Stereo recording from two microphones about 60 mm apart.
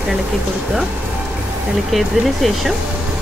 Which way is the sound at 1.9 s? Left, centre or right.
Centre.